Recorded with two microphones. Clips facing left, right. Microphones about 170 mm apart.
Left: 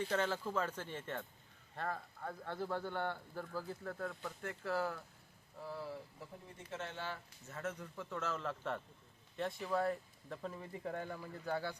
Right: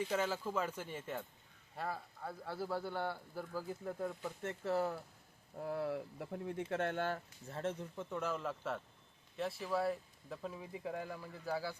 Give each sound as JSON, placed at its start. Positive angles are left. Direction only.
{"t": 0.0, "sound": "speech", "side_deg": -10}
{"t": 5.5, "sound": "speech", "side_deg": -55}
{"t": 7.4, "sound": "speech", "side_deg": -30}